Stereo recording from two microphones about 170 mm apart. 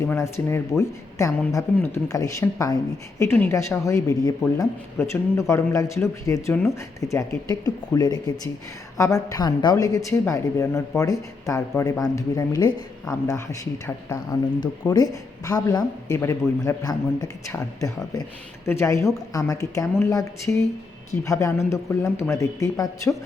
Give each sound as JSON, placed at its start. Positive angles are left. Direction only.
{"t": 0.0, "sound": "speech", "side_deg": 15}